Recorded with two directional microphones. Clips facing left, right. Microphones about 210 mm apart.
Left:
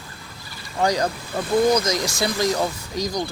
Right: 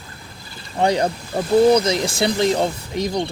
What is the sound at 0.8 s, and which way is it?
Speech, 25° right (ahead or behind).